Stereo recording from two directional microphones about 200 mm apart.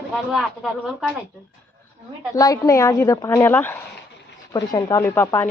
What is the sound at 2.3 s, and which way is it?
Speech, 15° left (ahead or behind).